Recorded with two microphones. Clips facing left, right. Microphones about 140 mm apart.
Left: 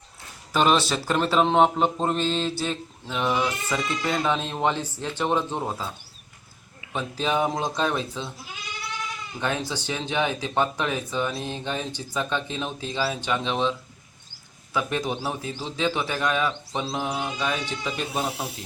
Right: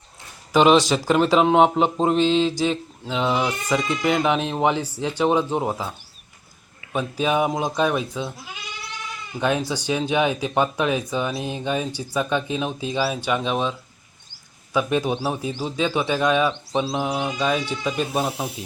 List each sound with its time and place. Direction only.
0.5 s speech: 10° right (ahead or behind)
3.1 s speech: 15° right (ahead or behind)
6.9 s speech: 15° right (ahead or behind)
9.4 s speech: 15° right (ahead or behind)